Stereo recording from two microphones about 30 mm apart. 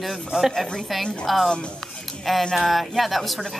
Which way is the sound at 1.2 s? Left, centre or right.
Centre.